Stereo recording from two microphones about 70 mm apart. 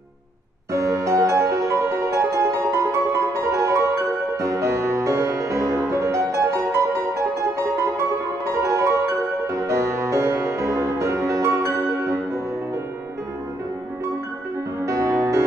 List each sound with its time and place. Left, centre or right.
0.7 s music: right
14.9 s music: right